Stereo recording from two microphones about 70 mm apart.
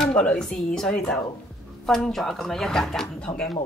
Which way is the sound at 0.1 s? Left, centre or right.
Centre.